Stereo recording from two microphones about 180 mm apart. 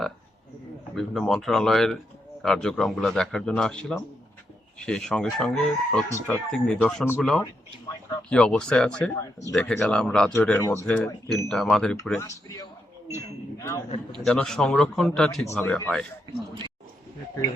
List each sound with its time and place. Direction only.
0.9 s speech: centre (ahead or behind)
6.5 s speech: 5° left (ahead or behind)
12.2 s speech: 20° left (ahead or behind)
14.3 s speech: centre (ahead or behind)